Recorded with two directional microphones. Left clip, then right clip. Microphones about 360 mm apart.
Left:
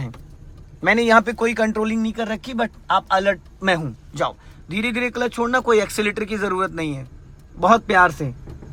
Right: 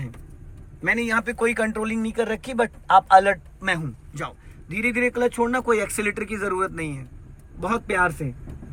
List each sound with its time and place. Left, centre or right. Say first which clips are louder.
0.8 s speech: left 8 dB; centre